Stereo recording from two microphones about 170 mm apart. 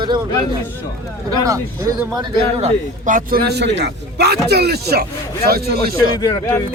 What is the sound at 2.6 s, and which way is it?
A man's voice, 50° right (ahead or behind).